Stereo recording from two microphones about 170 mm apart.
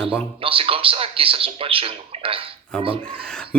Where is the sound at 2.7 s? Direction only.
5° left (ahead or behind).